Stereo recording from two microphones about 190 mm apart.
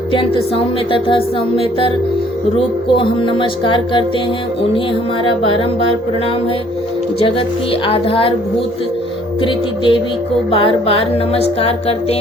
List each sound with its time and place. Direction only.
0.1 s music: 25° left (ahead or behind)
5.2 s music: 30° left (ahead or behind)
7.2 s music: 30° left (ahead or behind)
9.4 s music: 25° left (ahead or behind)